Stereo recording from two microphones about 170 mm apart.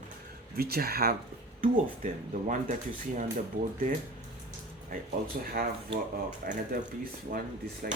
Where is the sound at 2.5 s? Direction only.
50° right (ahead or behind).